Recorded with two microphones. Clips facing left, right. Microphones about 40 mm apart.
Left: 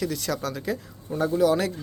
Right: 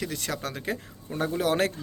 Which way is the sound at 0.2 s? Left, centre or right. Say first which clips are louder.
Left 4 dB; right.